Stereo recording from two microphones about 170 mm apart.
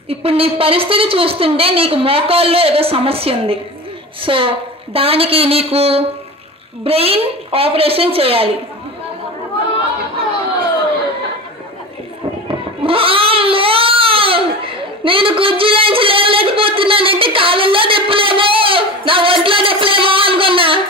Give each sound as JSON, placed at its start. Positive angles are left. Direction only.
{"t": 0.1, "sound": "a woman's voice", "side_deg": -35}
{"t": 12.4, "sound": "crying", "side_deg": -35}